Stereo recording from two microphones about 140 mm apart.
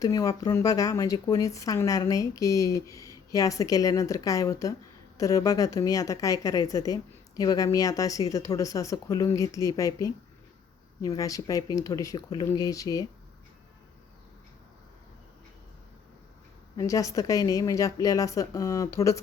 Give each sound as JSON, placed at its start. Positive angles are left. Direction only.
{"t": 0.0, "sound": "speech", "side_deg": 25}
{"t": 16.7, "sound": "speech", "side_deg": 25}